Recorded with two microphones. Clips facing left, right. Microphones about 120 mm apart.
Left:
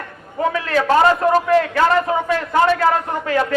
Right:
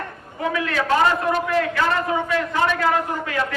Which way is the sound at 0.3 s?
35° left (ahead or behind).